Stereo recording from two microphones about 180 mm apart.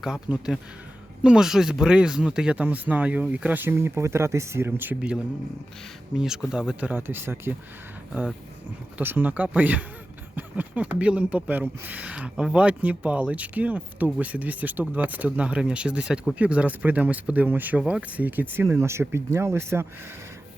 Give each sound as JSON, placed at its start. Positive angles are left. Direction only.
{"t": 0.0, "sound": "speech", "side_deg": -5}
{"t": 8.1, "sound": "speech", "side_deg": 0}
{"t": 9.0, "sound": "speech", "side_deg": -10}